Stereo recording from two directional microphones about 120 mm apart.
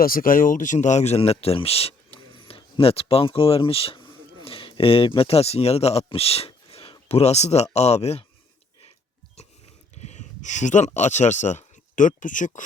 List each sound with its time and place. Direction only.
0.4 s speech: 90° left; by 2.0 s 55° left (ahead or behind)
2.1 s speech: 45° left (ahead or behind); by 8.2 s 60° left (ahead or behind)
10.0 s speech: 75° left (ahead or behind); by 12.6 s 90° left